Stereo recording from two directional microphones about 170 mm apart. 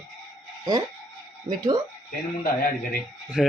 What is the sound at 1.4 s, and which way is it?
Speech, 25° right (ahead or behind).